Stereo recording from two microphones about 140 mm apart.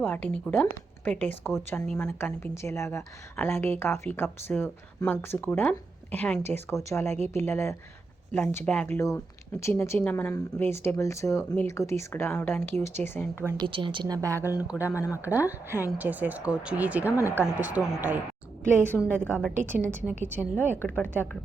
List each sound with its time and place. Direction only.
0.0 s speech: 10° left (ahead or behind)
6.7 s speech: 20° left (ahead or behind)
9.0 s speech: 20° left (ahead or behind)
13.6 s a woman's voice: 35° right (ahead or behind); by 14.9 s 15° right (ahead or behind)
14.9 s speech: 20° left (ahead or behind)
15.2 s speech: 15° right (ahead or behind)
17.1 s speech: 20° left (ahead or behind)
17.6 s speech: 10° right (ahead or behind)
18.9 s speech: 10° left (ahead or behind)
19.7 s speech: 15° right (ahead or behind)
20.6 s speech: 10° left (ahead or behind)